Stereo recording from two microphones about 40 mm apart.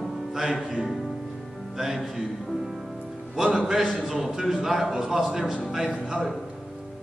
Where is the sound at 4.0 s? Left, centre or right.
Centre.